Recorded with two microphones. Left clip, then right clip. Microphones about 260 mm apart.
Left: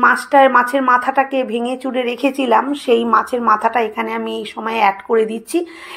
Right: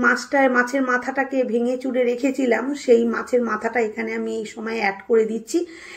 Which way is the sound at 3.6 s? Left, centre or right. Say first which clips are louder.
Left 6 dB; left.